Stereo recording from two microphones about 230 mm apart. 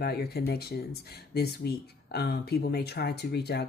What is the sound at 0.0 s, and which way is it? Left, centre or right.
Speech, left.